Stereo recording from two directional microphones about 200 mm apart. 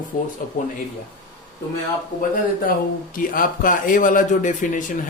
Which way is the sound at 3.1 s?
45° left (ahead or behind).